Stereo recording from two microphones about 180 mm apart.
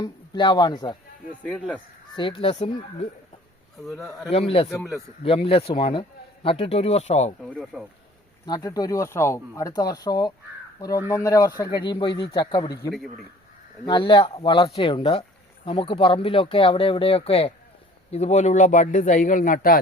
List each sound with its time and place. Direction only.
0.0 s speech: 25° left (ahead or behind)
1.4 s speech: 5° left (ahead or behind)
2.1 s a man's voice: 25° left (ahead or behind)
4.3 s a man's voice: 35° left (ahead or behind)
7.5 s speech: centre (ahead or behind)
8.4 s speech: 20° left (ahead or behind)
13.8 s speech: 25° left (ahead or behind); by 19.8 s 50° left (ahead or behind)